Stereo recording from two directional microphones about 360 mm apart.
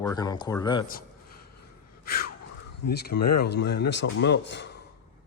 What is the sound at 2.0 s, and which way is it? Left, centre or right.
Gasp, left.